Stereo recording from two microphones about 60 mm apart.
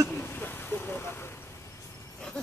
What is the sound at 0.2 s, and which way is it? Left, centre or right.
Vehicle, left.